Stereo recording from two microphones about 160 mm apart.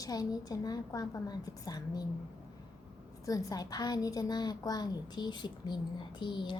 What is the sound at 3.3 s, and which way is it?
A woman's voice, 20° left (ahead or behind).